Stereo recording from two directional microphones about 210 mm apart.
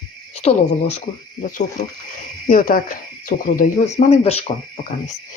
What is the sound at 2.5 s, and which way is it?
Speech, 40° left (ahead or behind).